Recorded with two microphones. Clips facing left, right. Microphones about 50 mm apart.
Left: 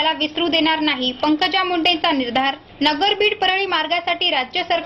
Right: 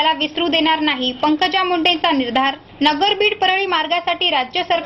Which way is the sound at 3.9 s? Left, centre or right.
Centre.